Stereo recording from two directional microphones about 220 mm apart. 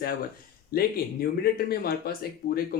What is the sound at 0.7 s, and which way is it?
Speech, 45° left (ahead or behind).